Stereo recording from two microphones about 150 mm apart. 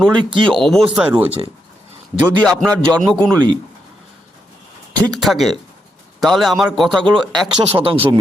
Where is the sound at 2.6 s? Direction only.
5° left (ahead or behind).